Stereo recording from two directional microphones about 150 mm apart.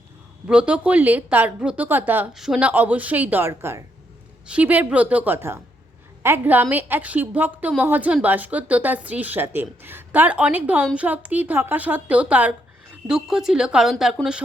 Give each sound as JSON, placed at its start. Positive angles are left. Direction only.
{"t": 0.4, "sound": "a woman's voice", "side_deg": -5}